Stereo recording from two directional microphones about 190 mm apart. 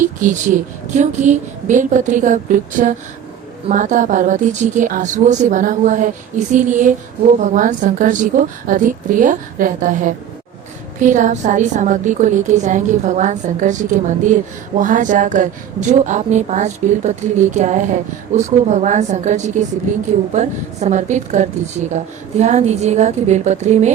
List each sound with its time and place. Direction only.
0.0 s a woman's voice: 45° right (ahead or behind)